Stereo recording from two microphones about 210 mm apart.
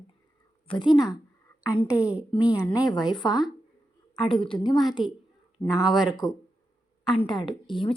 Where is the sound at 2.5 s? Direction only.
15° left (ahead or behind).